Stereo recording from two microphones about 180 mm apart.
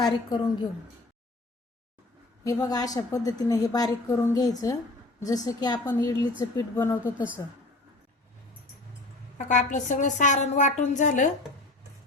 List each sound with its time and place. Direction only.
0.0 s a woman's voice: 25° left (ahead or behind)
2.4 s a woman's voice: 20° left (ahead or behind)
7.0 s speech: 10° right (ahead or behind)
9.4 s a woman's voice: 45° left (ahead or behind)